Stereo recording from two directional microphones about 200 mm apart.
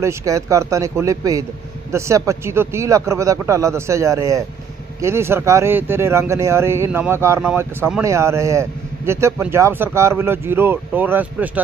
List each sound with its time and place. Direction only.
0.0 s speech: 15° right (ahead or behind)